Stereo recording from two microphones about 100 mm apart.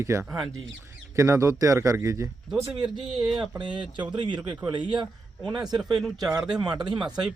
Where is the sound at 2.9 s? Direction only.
5° right (ahead or behind).